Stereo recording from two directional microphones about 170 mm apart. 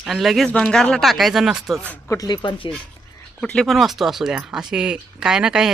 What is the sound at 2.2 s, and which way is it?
Speech, 25° left (ahead or behind).